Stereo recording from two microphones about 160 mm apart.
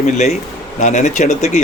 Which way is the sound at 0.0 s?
45° left (ahead or behind).